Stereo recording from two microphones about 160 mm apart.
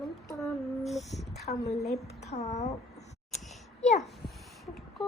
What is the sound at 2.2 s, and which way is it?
Speech, 45° left (ahead or behind).